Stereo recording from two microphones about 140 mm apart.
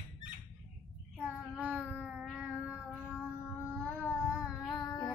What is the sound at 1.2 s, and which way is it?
Child singing, 10° right (ahead or behind).